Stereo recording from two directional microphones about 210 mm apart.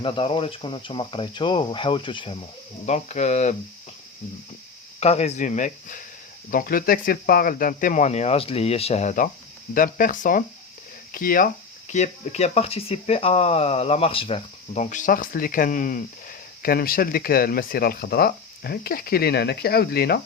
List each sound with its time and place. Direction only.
0.0 s speech: 25° left (ahead or behind)
4.9 s speech: 30° left (ahead or behind); by 20.2 s 50° left (ahead or behind)